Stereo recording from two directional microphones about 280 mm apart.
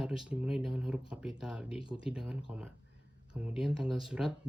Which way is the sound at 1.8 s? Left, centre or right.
Centre.